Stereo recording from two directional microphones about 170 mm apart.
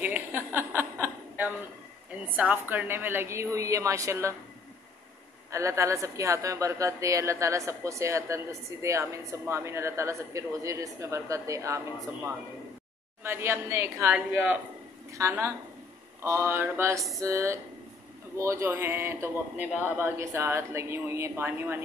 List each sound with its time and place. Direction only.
0.0 s chuckle: 10° right (ahead or behind)
2.2 s speech: 10° right (ahead or behind)
5.5 s speech: 15° right (ahead or behind)